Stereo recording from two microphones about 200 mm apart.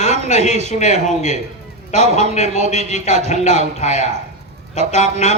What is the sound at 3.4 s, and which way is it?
Speech, 35° left (ahead or behind).